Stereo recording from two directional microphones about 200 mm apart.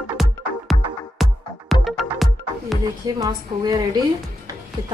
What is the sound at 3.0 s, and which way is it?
Speech, 20° right (ahead or behind).